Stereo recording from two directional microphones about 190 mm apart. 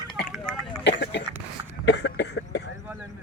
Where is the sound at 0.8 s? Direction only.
65° left (ahead or behind).